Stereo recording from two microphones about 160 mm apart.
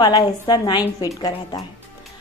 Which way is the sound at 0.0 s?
30° left (ahead or behind).